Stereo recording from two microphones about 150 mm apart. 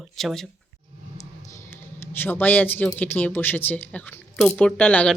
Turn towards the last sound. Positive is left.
turn(degrees=10)  # may be behind; listen again after turning